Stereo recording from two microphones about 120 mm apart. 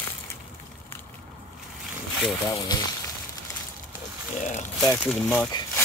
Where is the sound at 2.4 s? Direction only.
35° left (ahead or behind).